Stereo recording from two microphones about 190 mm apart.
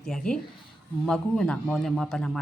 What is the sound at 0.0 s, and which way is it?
Speech, 5° left (ahead or behind).